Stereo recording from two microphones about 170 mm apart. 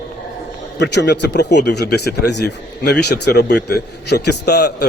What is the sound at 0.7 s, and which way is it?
A man's voice, 90° left.